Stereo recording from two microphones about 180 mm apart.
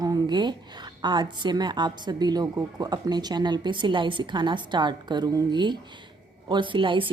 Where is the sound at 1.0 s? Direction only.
25° right (ahead or behind).